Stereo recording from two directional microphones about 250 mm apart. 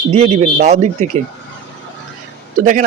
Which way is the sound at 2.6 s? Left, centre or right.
Right.